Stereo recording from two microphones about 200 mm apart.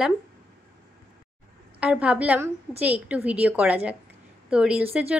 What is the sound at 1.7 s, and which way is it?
Speech, 5° right (ahead or behind).